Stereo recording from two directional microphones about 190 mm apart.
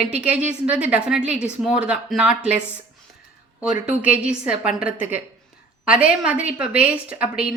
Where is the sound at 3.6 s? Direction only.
5° right (ahead or behind).